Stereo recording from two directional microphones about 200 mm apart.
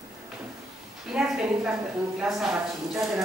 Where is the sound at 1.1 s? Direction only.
5° right (ahead or behind).